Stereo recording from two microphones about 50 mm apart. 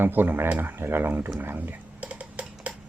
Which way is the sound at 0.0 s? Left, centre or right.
Right.